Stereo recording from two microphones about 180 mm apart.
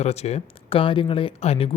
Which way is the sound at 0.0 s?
35° left (ahead or behind).